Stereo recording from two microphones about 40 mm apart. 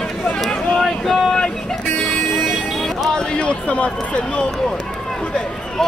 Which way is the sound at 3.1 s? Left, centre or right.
Left.